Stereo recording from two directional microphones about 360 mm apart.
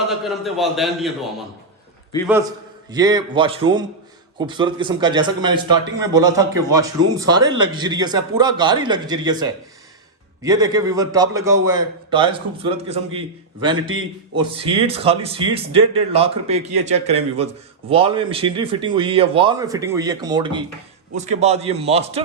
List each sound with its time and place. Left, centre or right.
0.1 s a man's voice: centre
2.2 s a man's voice: centre
13.7 s a man's voice: right
14.3 s a man's voice: centre